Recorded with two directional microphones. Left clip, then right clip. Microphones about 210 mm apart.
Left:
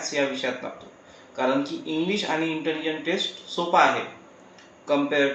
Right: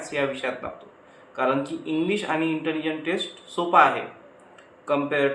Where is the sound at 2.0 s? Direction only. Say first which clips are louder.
Right 1 dB; 15° right (ahead or behind).